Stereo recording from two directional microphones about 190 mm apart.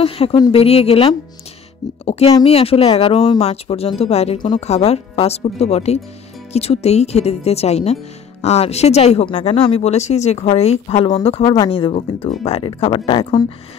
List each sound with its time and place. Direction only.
0.0 s speech: 30° left (ahead or behind)